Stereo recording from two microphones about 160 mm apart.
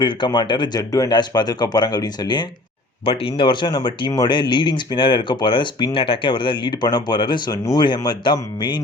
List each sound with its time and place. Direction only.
0.0 s speech: 30° left (ahead or behind)